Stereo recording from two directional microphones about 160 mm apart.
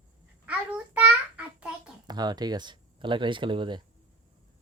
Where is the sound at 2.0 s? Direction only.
25° right (ahead or behind).